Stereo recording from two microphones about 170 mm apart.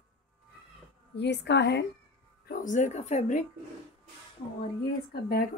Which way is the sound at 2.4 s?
50° left (ahead or behind).